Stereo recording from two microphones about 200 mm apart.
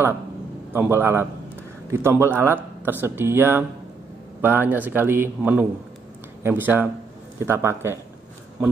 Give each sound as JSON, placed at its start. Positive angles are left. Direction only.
{"t": 0.7, "sound": "speech", "side_deg": -10}